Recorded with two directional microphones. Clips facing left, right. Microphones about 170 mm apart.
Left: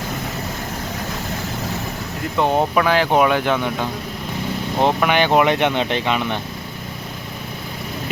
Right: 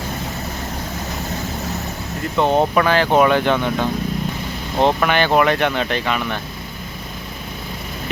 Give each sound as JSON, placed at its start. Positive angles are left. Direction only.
{"t": 2.4, "sound": "speech", "side_deg": 10}